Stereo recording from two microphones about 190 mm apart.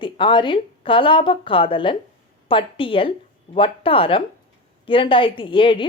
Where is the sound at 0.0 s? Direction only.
25° left (ahead or behind).